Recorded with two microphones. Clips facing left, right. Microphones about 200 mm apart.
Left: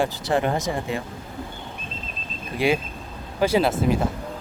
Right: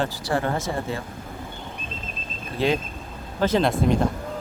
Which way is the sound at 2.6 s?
10° left (ahead or behind).